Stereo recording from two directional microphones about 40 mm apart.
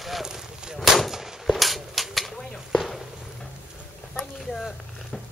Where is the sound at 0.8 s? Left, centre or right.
Centre.